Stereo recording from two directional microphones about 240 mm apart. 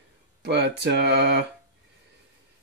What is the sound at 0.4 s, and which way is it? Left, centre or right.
Speech, right.